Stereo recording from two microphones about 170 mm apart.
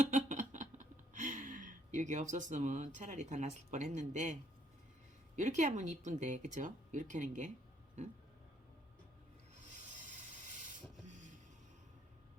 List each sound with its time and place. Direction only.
0.0 s a sound: 45° right (ahead or behind)
5.4 s speech: 45° right (ahead or behind)
10.5 s rub: 50° right (ahead or behind)
11.1 s vehicle: 45° right (ahead or behind)